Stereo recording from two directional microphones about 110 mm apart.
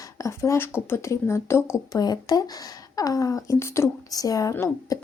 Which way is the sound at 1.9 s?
35° left (ahead or behind).